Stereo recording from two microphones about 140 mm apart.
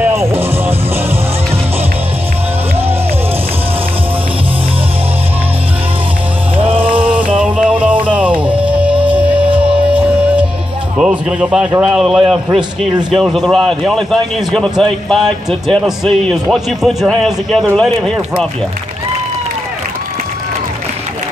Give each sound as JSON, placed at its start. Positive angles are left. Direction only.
{"t": 0.0, "sound": "music", "side_deg": -20}
{"t": 6.5, "sound": "music", "side_deg": -40}
{"t": 7.0, "sound": "a sound", "side_deg": -10}
{"t": 7.3, "sound": "music", "side_deg": -10}
{"t": 11.8, "sound": "a man's voice", "side_deg": -5}